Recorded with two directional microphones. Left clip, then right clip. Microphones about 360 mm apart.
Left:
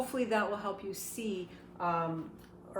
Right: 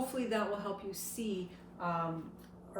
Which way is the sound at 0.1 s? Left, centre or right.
Centre.